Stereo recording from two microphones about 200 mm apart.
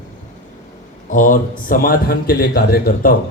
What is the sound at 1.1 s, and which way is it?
A man's voice, 40° left (ahead or behind).